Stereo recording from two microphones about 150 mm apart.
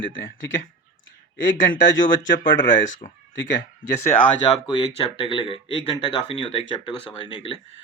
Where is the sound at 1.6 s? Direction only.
65° left (ahead or behind).